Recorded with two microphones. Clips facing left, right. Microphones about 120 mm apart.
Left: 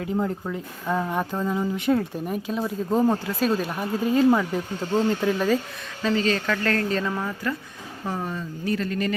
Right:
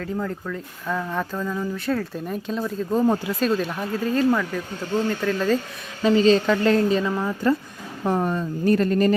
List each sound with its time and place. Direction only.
0.0 s speech: 20° left (ahead or behind)
2.2 s speech: 10° left (ahead or behind)
6.0 s speech: 20° right (ahead or behind)
7.0 s speech: 5° right (ahead or behind)
8.0 s speech: 55° right (ahead or behind)